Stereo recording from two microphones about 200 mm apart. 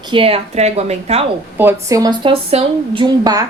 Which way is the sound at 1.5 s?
15° right (ahead or behind).